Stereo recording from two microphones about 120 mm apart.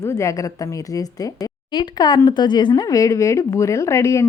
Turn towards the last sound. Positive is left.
turn(degrees=25)  # may be behind; listen again after turning